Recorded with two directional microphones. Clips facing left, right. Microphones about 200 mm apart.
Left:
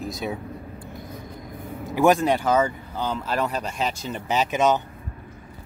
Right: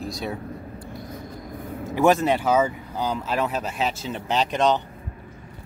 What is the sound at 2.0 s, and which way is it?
Speech, centre (ahead or behind).